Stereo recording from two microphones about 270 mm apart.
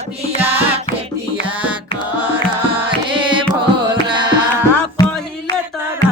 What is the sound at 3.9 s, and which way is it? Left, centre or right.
Tabla, centre.